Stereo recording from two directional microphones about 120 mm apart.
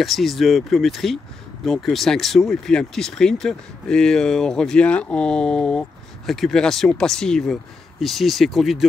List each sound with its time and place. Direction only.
0.0 s speech: centre (ahead or behind)